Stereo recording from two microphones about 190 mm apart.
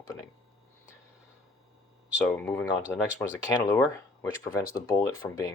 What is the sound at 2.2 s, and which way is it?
Speech, 10° left (ahead or behind).